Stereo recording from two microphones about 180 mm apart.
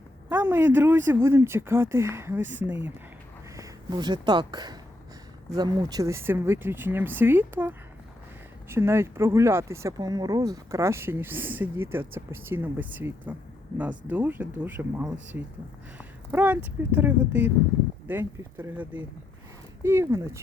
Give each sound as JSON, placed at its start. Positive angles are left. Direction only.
{"t": 0.3, "sound": "speech", "side_deg": -10}
{"t": 3.6, "sound": "speech", "side_deg": -20}